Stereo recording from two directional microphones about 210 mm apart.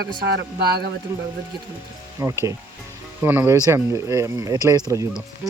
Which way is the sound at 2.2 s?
15° right (ahead or behind).